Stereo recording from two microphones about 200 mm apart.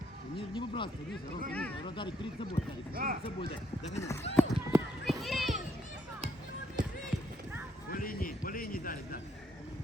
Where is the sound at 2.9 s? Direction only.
45° right (ahead or behind).